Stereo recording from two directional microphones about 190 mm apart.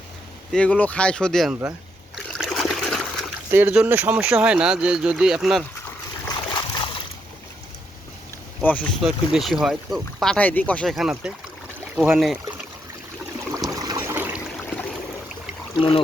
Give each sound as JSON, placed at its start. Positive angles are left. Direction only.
{"t": 0.5, "sound": "speech", "side_deg": 5}
{"t": 2.1, "sound": "trickle", "side_deg": 0}
{"t": 3.5, "sound": "speech", "side_deg": -10}
{"t": 6.2, "sound": "a sound", "side_deg": 20}
{"t": 8.6, "sound": "speech", "side_deg": 10}
{"t": 13.7, "sound": "trickle", "side_deg": -15}
{"t": 15.7, "sound": "speech", "side_deg": 30}